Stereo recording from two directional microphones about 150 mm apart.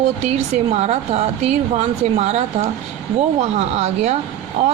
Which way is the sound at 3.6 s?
45° right (ahead or behind).